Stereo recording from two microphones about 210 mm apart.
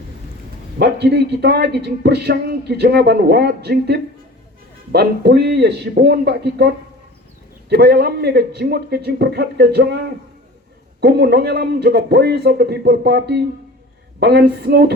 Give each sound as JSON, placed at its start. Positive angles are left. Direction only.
{"t": 0.8, "sound": "a man's voice", "side_deg": -50}
{"t": 7.7, "sound": "a man's voice", "side_deg": -50}
{"t": 11.0, "sound": "a man's voice", "side_deg": -50}